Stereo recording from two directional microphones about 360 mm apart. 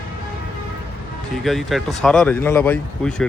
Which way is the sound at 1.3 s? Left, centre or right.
Centre.